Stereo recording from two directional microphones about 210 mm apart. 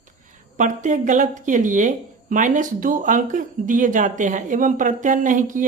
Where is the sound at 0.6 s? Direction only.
35° right (ahead or behind).